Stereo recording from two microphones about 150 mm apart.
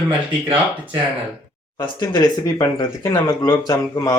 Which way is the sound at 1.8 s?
30° left (ahead or behind).